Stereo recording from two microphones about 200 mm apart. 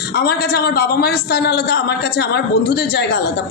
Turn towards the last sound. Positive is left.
turn(degrees=55)  # may be behind; listen again after turning